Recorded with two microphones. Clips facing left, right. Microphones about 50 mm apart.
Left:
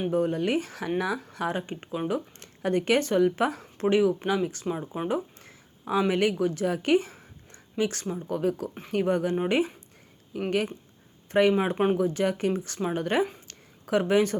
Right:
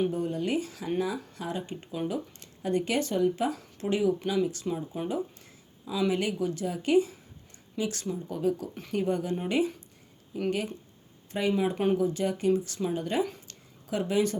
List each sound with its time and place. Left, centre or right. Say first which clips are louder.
0.1 s speech: left 4 dB; left
2.1 s speech: left 3 dB; left
8.3 s speech: left 2 dB; left
9.3 s speech: left 2 dB; left
10.3 s speech: left 3 dB; left
11.5 s speech: left 3 dB; left
11.9 s speech: left 2 dB; left
13.5 s a sound: left 7 dB; left